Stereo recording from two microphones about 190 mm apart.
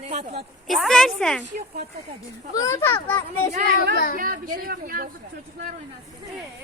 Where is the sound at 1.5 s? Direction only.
45° right (ahead or behind).